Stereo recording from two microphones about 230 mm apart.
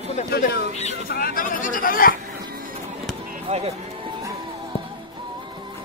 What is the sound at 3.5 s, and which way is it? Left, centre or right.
Speech, right.